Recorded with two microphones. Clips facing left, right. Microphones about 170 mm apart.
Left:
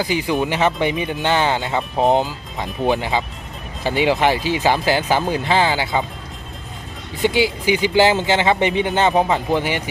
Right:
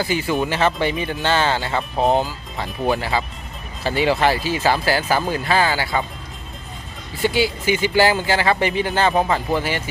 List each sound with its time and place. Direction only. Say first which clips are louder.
0.0 s speech: left 1 dB; 15° left (ahead or behind)
7.2 s speech: left 2 dB; 15° left (ahead or behind)